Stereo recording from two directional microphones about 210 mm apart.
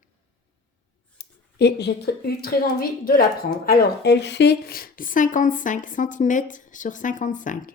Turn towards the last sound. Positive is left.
turn(degrees=40)  # may be behind; listen again after turning